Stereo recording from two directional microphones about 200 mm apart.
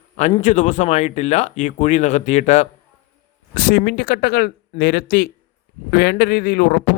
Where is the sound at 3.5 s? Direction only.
50° left (ahead or behind).